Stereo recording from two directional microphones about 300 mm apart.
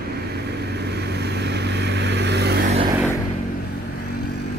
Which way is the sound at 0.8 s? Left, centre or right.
Right.